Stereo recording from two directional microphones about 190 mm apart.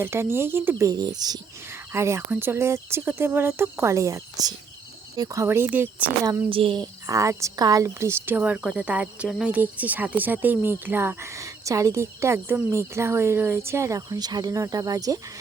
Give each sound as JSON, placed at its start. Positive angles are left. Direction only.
{"t": 0.0, "sound": "speech", "side_deg": -10}
{"t": 6.5, "sound": "speech", "side_deg": -30}